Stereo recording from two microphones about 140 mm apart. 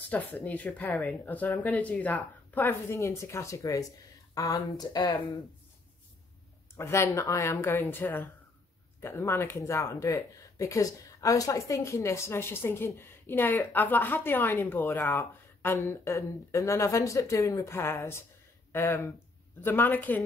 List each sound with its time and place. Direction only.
0.1 s speech: 10° left (ahead or behind); by 5.1 s 30° left (ahead or behind)
6.8 s speech: 20° left (ahead or behind)